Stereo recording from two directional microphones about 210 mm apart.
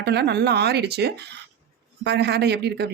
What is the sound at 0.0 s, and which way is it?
Speech, 50° right (ahead or behind).